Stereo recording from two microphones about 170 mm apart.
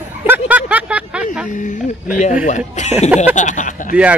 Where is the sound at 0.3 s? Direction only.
10° right (ahead or behind).